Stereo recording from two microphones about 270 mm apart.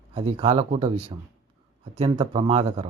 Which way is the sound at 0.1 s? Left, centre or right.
Right.